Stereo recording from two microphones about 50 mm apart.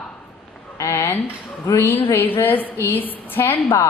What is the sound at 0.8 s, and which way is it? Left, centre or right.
Speech, left.